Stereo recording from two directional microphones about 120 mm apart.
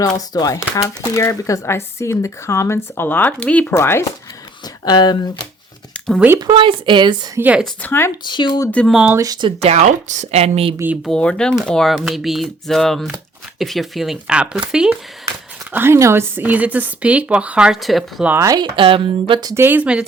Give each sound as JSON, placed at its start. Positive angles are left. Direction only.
{"t": 0.0, "sound": "speech", "side_deg": 30}
{"t": 4.6, "sound": "speech", "side_deg": 35}
{"t": 6.1, "sound": "speech", "side_deg": -15}
{"t": 6.4, "sound": "speech", "side_deg": -45}
{"t": 7.3, "sound": "speech", "side_deg": -15}
{"t": 7.8, "sound": "speech", "side_deg": 20}
{"t": 8.2, "sound": "speech", "side_deg": 40}
{"t": 8.9, "sound": "speech", "side_deg": -5}
{"t": 9.1, "sound": "speech", "side_deg": -30}
{"t": 9.6, "sound": "speech", "side_deg": -65}
{"t": 11.0, "sound": "speech", "side_deg": 5}
{"t": 15.7, "sound": "speech", "side_deg": -20}
{"t": 18.4, "sound": "speech", "side_deg": -35}
{"t": 19.5, "sound": "speech", "side_deg": -20}